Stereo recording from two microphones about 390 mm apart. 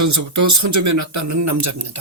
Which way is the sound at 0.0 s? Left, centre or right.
Right.